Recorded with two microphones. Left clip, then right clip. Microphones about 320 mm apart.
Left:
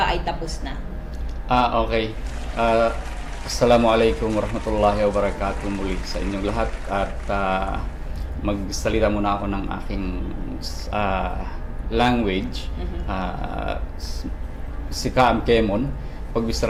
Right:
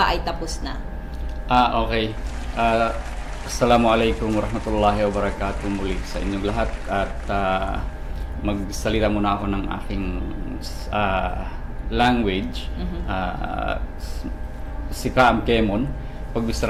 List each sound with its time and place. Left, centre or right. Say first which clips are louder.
0.0 s a woman's voice: right 1 dB; right
1.5 s speech: right 1 dB; centre
15.0 s speech: right 1 dB; centre